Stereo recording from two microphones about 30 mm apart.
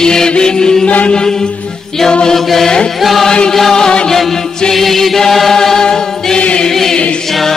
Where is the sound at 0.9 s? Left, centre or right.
Left.